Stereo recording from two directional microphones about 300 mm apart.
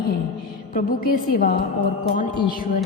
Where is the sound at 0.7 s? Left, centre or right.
Left.